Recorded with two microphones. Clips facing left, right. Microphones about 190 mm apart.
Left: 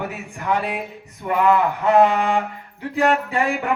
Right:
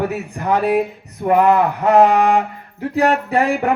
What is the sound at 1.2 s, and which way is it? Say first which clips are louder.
Speech: right 4 dB; 40° right (ahead or behind).